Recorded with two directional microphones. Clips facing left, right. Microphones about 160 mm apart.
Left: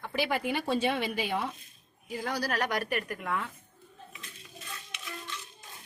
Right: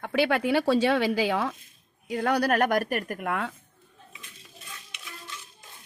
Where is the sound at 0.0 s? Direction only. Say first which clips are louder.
Right 6 dB; 70° right (ahead or behind); by 1.5 s 90° right.